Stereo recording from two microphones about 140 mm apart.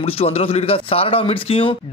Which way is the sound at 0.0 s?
45° left (ahead or behind).